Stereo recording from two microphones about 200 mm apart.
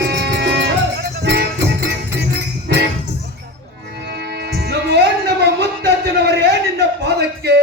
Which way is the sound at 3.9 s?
55° right (ahead or behind).